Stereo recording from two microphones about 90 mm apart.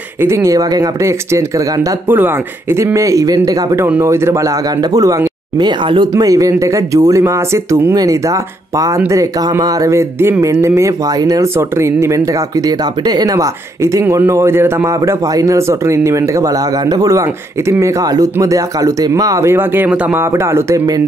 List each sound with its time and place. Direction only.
0.2 s speech: 30° right (ahead or behind)
2.0 s speech: 25° right (ahead or behind); by 5.3 s 40° right (ahead or behind)
5.6 s speech: 60° right (ahead or behind)
6.1 s speech: 40° right (ahead or behind)
12.6 s speech: 45° right (ahead or behind)
19.5 s a man's voice: 25° right (ahead or behind)